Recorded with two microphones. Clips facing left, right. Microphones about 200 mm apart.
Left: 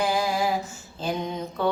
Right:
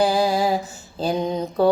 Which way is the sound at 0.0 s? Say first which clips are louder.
Right 5 dB; 35° right (ahead or behind).